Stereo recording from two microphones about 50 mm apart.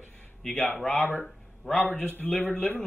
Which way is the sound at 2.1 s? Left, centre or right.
Left.